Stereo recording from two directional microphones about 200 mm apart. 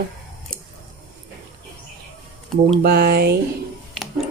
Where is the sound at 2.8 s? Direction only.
50° right (ahead or behind).